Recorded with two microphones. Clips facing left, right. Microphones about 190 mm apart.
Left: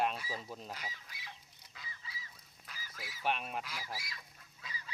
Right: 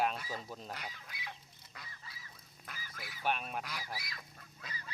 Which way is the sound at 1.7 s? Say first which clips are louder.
Left 1 dB; 55° right (ahead or behind).